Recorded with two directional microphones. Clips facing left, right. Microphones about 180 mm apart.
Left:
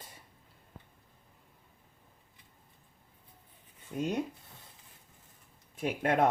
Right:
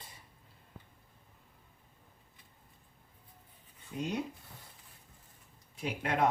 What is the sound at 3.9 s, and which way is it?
Speech, 45° left (ahead or behind).